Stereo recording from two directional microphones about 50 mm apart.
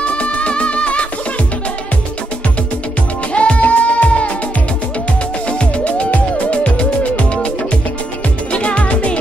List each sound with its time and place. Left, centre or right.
0.0 s music: left
3.3 s music: left
6.1 s music: left
8.5 s music: left